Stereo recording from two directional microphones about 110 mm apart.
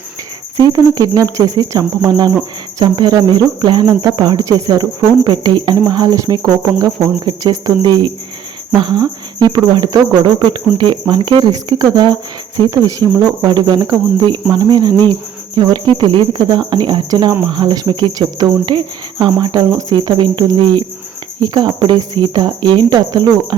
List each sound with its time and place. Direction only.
0.6 s cricket: 35° right (ahead or behind)